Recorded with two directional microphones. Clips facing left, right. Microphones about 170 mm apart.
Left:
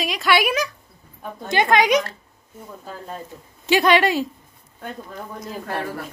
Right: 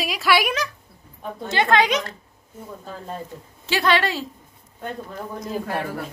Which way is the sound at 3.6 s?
15° left (ahead or behind).